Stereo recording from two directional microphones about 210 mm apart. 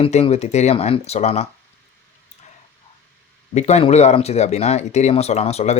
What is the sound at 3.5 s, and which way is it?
Speech, 30° left (ahead or behind).